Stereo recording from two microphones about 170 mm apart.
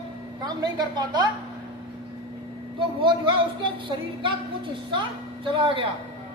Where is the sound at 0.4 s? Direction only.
25° right (ahead or behind).